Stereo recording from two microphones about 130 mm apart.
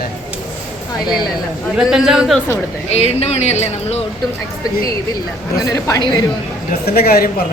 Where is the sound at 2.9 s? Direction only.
55° left (ahead or behind).